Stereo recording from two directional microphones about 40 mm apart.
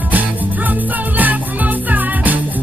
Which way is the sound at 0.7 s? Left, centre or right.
Right.